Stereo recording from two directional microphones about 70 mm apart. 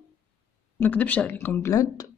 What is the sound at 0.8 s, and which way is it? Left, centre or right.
Speech, left.